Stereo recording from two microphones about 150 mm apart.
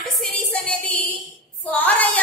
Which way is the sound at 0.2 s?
5° left (ahead or behind).